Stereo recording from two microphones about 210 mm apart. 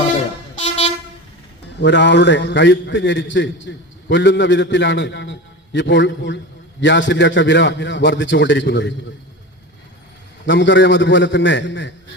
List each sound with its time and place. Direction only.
1.8 s a man's voice: 55° left (ahead or behind)
10.4 s a man's voice: 60° left (ahead or behind)